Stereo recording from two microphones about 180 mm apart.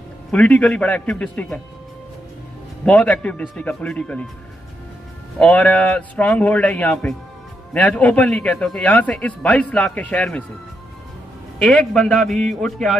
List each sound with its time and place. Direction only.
0.3 s a man's voice: 10° left (ahead or behind)
2.8 s a man's voice: 5° left (ahead or behind)
5.4 s a man's voice: 5° left (ahead or behind)
11.6 s a man's voice: 5° left (ahead or behind)